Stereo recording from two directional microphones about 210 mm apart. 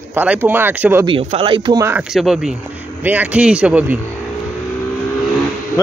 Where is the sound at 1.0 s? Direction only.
25° right (ahead or behind).